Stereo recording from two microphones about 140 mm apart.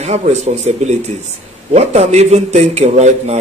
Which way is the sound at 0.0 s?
50° right (ahead or behind).